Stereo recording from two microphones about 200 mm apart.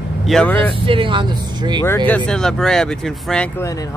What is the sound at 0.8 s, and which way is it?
Speech, 25° right (ahead or behind).